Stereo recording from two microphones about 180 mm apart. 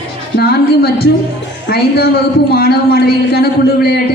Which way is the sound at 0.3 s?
60° left (ahead or behind).